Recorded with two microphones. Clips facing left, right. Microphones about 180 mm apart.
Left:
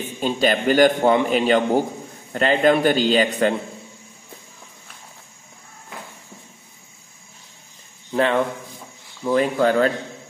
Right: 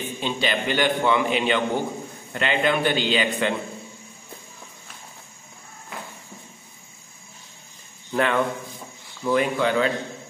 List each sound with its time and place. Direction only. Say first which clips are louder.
0.2 s a man's voice: left 6 dB; 45° left (ahead or behind)
8.1 s a sound: left 3 dB; 30° left (ahead or behind)
9.2 s speech: left 3 dB; 35° left (ahead or behind)